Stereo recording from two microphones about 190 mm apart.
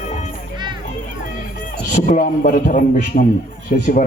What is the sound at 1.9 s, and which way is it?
Speech, 40° left (ahead or behind).